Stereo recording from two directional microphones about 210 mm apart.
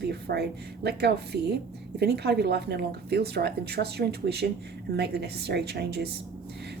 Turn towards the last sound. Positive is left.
turn(degrees=-50)  # may be behind; listen again after turning